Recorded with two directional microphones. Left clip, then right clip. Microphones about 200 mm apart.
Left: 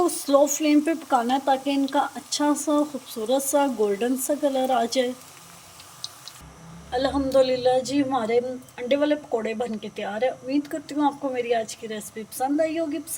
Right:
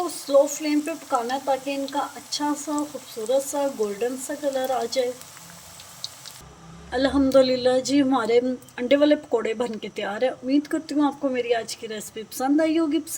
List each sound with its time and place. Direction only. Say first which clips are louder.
0.0 s frying: even; 40° left (ahead or behind)
6.9 s a woman's voice: right 2 dB; 15° right (ahead or behind)